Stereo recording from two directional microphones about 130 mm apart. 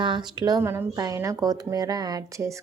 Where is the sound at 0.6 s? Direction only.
20° right (ahead or behind).